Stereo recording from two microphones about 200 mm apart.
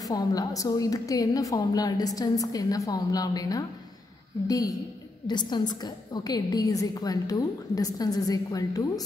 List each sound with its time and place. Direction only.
0.1 s a woman's voice: 20° left (ahead or behind)